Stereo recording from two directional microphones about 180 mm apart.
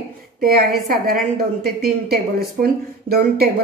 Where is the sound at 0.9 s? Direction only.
55° right (ahead or behind).